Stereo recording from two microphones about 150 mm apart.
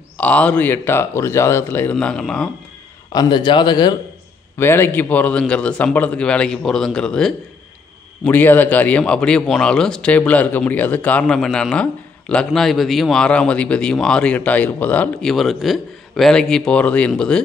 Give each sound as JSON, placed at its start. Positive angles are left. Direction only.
{"t": 0.2, "sound": "speech", "side_deg": 10}
{"t": 3.1, "sound": "speech", "side_deg": 30}
{"t": 4.6, "sound": "speech", "side_deg": 15}